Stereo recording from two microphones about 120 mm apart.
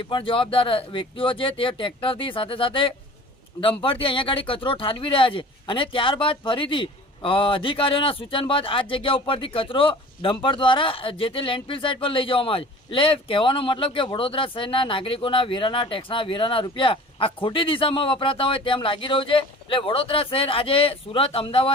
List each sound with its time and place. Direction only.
0.0 s speech: 45° left (ahead or behind)